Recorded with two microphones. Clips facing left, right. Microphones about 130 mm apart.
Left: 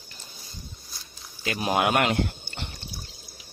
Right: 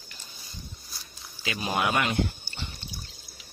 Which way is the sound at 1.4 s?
50° left (ahead or behind).